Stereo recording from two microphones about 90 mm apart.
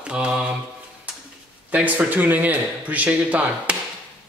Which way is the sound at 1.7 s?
15° right (ahead or behind).